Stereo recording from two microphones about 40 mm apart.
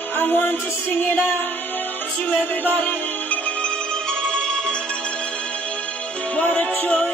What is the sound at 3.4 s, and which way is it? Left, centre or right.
Music, left.